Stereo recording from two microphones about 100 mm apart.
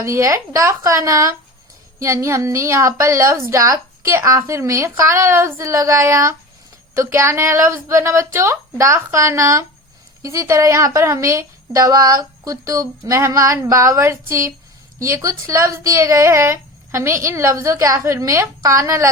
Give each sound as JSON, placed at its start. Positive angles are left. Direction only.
{"t": 0.0, "sound": "a woman's voice", "side_deg": -30}